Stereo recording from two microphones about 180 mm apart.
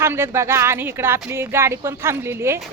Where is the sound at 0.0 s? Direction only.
15° right (ahead or behind).